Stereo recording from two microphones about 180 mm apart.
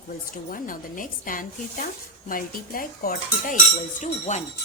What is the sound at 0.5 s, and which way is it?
A woman's voice, 50° left (ahead or behind).